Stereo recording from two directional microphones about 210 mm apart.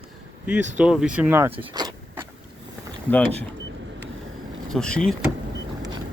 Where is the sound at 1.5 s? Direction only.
20° right (ahead or behind).